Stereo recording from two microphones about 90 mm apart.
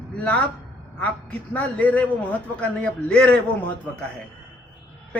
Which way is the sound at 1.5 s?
15° left (ahead or behind).